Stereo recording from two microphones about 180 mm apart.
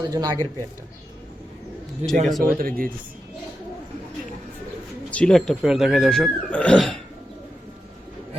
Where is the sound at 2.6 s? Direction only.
55° right (ahead or behind).